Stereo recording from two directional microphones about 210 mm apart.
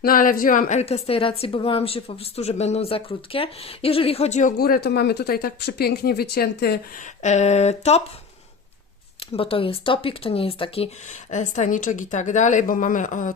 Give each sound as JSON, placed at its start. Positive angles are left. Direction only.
{"t": 0.0, "sound": "speech", "side_deg": 40}
{"t": 7.2, "sound": "speech", "side_deg": 35}
{"t": 9.3, "sound": "speech", "side_deg": 25}